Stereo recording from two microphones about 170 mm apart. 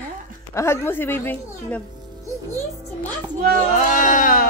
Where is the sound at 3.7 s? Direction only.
50° left (ahead or behind).